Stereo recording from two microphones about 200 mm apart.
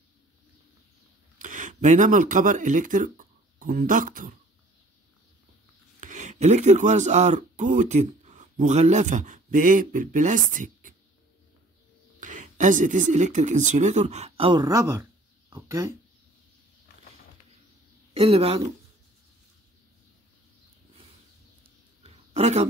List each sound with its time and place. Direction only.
1.4 s speech: 40° right (ahead or behind)
5.9 s speech: 40° right (ahead or behind)
12.2 s speech: 40° right (ahead or behind)
14.6 s speech: 15° right (ahead or behind)
18.1 s speech: 30° right (ahead or behind)
22.0 s a sound: 30° right (ahead or behind)